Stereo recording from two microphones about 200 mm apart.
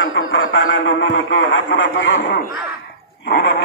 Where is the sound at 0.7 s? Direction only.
70° left (ahead or behind).